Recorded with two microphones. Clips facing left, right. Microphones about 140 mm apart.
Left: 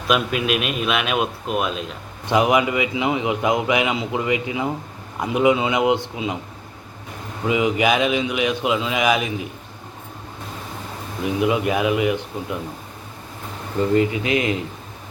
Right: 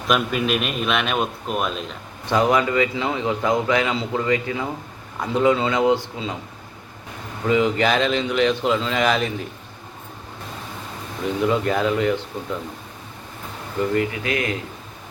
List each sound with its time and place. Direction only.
0.1 s a man's voice: centre (ahead or behind)
2.3 s a man's voice: 15° left (ahead or behind)
7.4 s a man's voice: 10° left (ahead or behind)
11.2 s a man's voice: 10° left (ahead or behind)
13.9 s speech: 20° left (ahead or behind)